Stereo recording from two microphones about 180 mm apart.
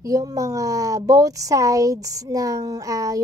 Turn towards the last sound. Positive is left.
turn(degrees=-20)  # may be behind; listen again after turning